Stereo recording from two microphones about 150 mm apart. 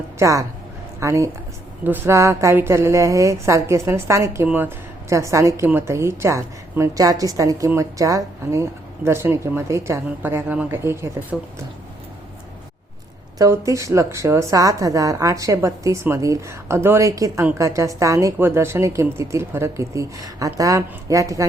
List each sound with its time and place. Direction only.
0.2 s a woman's voice: 20° right (ahead or behind)
13.4 s a woman's voice: 20° right (ahead or behind)